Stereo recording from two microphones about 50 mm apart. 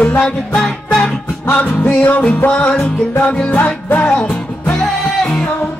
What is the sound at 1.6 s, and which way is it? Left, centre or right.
Music, left.